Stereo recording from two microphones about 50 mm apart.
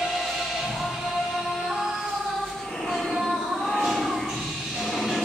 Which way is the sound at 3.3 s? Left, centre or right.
Centre.